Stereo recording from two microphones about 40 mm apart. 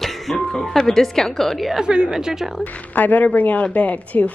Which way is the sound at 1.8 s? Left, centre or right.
Centre.